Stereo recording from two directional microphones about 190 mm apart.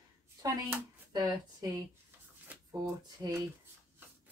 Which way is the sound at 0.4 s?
20° right (ahead or behind).